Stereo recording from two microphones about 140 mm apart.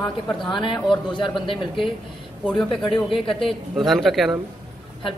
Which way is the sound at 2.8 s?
35° left (ahead or behind).